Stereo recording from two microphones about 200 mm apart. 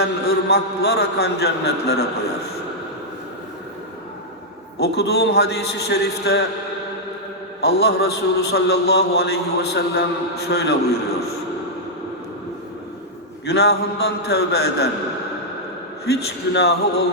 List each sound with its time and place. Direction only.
0.0 s a man's voice: 55° left (ahead or behind)
4.8 s a man's voice: 55° left (ahead or behind)
7.6 s a man's voice: 55° left (ahead or behind)
13.4 s a man's voice: 55° left (ahead or behind)
16.0 s a man's voice: 55° left (ahead or behind)